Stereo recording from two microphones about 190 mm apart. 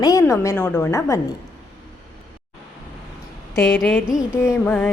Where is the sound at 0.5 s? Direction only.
5° left (ahead or behind).